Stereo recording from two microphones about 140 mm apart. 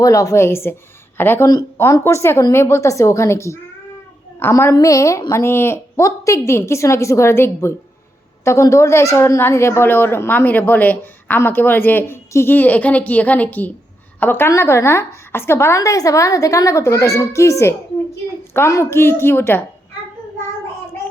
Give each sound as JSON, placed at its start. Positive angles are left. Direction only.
{"t": 0.0, "sound": "a woman's voice", "side_deg": 25}